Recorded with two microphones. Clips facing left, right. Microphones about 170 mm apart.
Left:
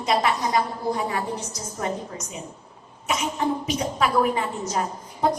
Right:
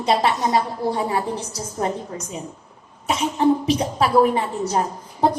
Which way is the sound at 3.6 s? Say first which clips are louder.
Right 4 dB; 30° right (ahead or behind).